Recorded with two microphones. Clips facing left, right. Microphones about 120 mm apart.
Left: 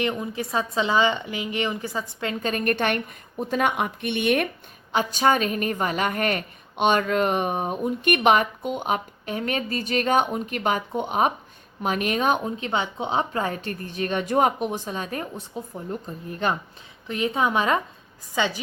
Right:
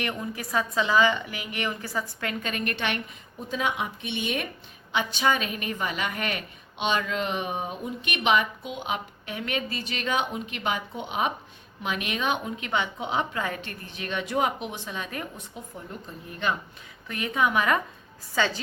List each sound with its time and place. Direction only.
0.0 s a woman's voice: 20° left (ahead or behind)
2.4 s a woman's voice: 40° left (ahead or behind); by 4.4 s 60° left (ahead or behind)
4.9 s a woman's voice: 40° left (ahead or behind)
17.1 s a woman's voice: 25° left (ahead or behind)
18.3 s a woman's voice: 15° left (ahead or behind)